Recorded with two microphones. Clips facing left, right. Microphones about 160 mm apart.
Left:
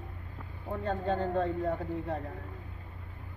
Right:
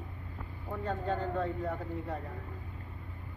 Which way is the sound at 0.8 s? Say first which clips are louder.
Left 3 dB; 30° left (ahead or behind).